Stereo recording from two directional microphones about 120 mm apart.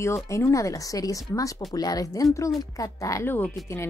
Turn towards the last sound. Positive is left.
turn(degrees=20)  # may be behind; listen again after turning